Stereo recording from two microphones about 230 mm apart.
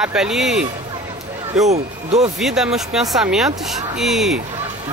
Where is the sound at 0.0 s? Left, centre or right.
Centre.